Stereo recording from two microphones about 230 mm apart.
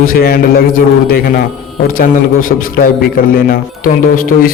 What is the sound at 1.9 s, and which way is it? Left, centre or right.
A man's voice, left.